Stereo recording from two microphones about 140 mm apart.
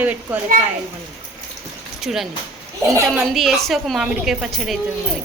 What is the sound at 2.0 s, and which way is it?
A woman's voice, centre (ahead or behind).